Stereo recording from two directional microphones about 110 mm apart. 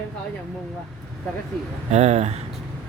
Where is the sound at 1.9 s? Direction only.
90° right.